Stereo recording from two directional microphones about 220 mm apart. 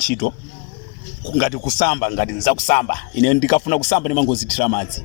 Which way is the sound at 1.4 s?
45° left (ahead or behind).